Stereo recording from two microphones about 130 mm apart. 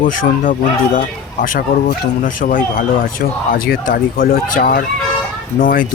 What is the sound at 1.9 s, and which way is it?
Speech, 90° left.